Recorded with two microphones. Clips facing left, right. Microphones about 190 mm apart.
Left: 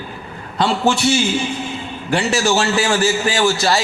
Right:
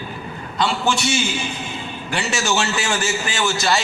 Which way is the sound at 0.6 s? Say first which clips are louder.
Left 4 dB; 60° left (ahead or behind).